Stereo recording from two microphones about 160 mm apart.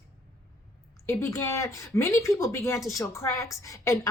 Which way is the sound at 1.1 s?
15° left (ahead or behind).